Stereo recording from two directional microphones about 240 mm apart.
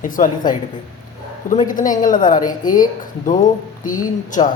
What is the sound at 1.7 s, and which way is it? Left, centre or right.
Speech, left.